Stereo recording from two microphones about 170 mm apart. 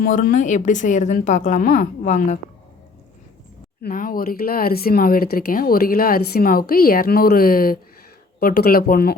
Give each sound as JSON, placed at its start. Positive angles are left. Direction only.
{"t": 0.0, "sound": "speech", "side_deg": 55}
{"t": 3.8, "sound": "speech", "side_deg": 55}